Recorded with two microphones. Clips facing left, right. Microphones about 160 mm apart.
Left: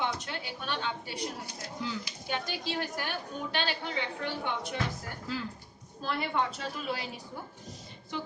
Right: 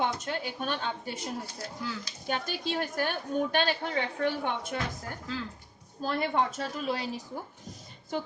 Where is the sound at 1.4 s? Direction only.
15° left (ahead or behind).